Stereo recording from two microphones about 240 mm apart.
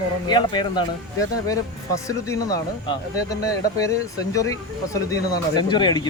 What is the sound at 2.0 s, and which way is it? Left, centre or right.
Speech, centre.